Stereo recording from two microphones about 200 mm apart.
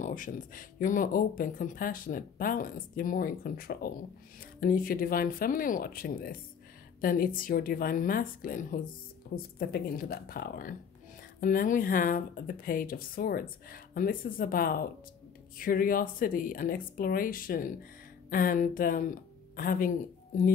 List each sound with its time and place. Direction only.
0.0 s speech: 40° left (ahead or behind)